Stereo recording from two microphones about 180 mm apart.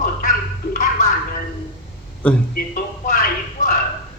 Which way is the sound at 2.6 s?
55° left (ahead or behind).